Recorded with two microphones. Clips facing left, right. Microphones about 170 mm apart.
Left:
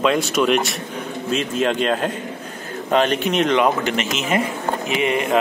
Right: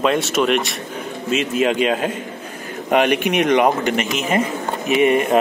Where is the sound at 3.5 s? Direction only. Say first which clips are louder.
Right 4 dB; 50° right (ahead or behind).